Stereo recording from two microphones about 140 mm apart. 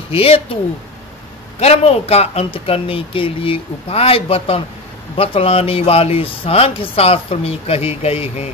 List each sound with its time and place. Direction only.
0.1 s speech: 45° left (ahead or behind)
1.6 s speech: 50° left (ahead or behind)